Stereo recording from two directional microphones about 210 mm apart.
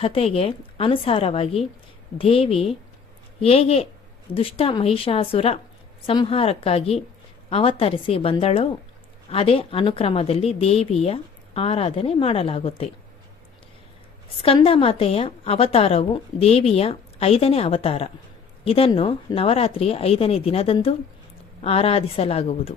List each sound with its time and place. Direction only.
0.0 s a woman's voice: 25° left (ahead or behind)
14.4 s a woman's voice: 25° left (ahead or behind)